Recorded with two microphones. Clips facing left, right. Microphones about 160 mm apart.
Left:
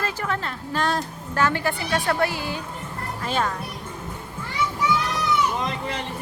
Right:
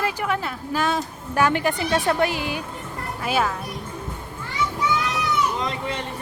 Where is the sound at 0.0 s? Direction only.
15° right (ahead or behind).